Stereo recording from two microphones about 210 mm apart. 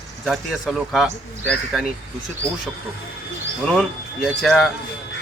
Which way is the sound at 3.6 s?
5° left (ahead or behind).